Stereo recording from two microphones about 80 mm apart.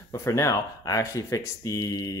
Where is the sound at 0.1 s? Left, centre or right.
Left.